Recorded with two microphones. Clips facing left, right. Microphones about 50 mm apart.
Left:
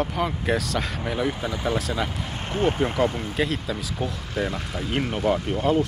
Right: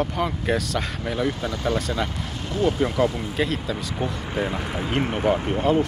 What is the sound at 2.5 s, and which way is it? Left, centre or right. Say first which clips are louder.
Speech: right 1 dB; left.